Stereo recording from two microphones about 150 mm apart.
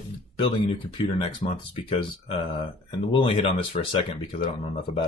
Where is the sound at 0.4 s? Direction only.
30° left (ahead or behind).